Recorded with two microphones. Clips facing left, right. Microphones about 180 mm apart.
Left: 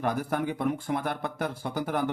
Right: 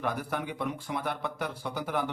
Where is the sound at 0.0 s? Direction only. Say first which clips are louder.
Left 4 dB; 45° left (ahead or behind).